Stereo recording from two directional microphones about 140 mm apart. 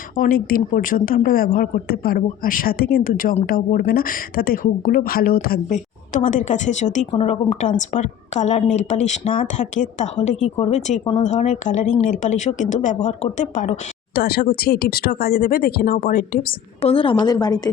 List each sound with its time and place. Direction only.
0.2 s a woman's voice: 90° left; by 7.7 s 50° left (ahead or behind)
7.8 s speech: 60° left (ahead or behind)
14.3 s a woman's voice: 90° left
16.8 s a woman's voice: 40° left (ahead or behind)